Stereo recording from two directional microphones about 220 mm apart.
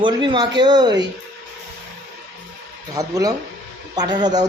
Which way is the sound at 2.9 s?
15° right (ahead or behind).